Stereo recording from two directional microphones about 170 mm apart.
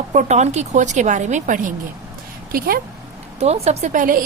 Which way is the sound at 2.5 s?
60° right (ahead or behind).